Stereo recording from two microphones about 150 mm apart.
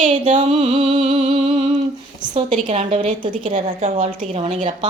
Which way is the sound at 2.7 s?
50° right (ahead or behind).